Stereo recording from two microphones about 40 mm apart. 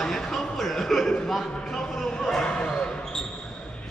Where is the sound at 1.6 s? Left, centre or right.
Centre.